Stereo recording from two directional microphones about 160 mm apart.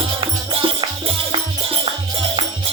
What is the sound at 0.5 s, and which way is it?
Music, 35° right (ahead or behind).